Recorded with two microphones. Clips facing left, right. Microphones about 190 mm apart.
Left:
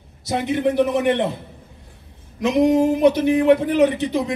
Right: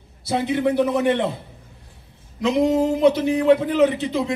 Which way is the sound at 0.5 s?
15° left (ahead or behind).